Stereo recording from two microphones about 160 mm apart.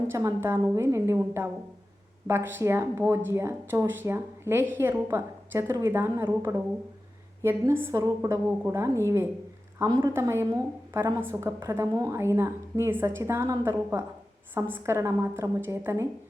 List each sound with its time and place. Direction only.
0.1 s a woman's voice: 15° right (ahead or behind)
7.4 s a woman's voice: 15° right (ahead or behind)